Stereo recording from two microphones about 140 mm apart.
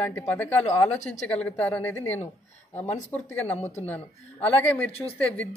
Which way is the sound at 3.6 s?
50° left (ahead or behind).